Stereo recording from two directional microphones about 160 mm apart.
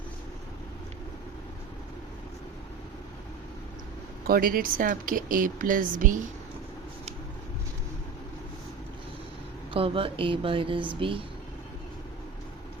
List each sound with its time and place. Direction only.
4.3 s a woman's voice: 65° right (ahead or behind)
9.7 s speech: 35° right (ahead or behind)